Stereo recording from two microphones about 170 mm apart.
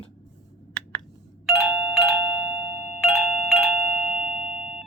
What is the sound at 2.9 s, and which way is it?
Music, centre (ahead or behind).